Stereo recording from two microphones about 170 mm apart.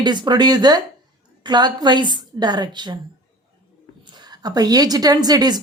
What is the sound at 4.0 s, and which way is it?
A woman's voice, 25° right (ahead or behind).